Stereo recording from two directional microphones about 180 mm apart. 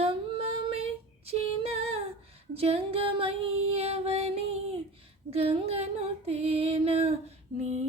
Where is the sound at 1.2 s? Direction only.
35° right (ahead or behind).